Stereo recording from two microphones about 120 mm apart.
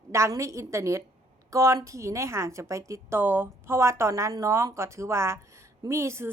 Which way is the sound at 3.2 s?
15° right (ahead or behind).